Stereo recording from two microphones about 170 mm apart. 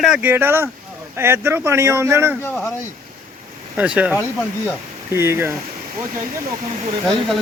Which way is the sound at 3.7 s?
10° right (ahead or behind).